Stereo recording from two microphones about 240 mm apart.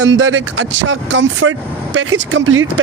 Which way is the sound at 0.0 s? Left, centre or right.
Right.